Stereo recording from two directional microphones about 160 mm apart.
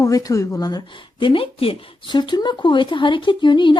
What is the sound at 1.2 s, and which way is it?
Speech, 35° left (ahead or behind).